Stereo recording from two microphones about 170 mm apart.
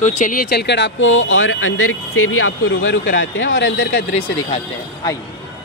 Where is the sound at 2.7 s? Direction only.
90° left.